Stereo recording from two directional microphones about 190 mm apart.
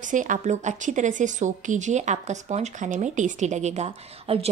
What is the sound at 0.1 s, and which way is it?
Speech, 40° right (ahead or behind).